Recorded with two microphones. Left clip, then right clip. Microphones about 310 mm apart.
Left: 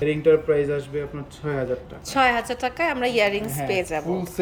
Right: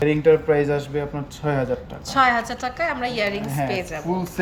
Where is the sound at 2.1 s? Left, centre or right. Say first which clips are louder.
Right 2 dB; centre.